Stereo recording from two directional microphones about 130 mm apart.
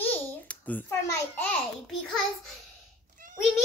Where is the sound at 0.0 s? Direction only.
10° left (ahead or behind).